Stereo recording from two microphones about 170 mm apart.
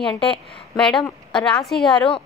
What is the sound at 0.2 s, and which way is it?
Speech, 30° left (ahead or behind).